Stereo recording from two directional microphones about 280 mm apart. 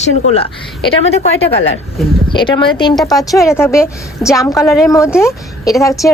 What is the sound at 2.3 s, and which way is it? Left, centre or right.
A woman's voice, centre.